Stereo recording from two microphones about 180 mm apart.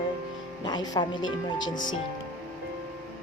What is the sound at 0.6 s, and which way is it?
Speech, 25° left (ahead or behind).